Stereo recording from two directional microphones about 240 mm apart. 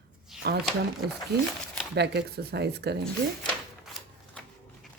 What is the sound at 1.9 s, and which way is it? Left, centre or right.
A woman's voice, right.